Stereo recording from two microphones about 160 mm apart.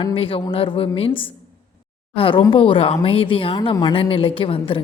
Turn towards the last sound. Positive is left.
turn(degrees=35)  # may be behind; listen again after turning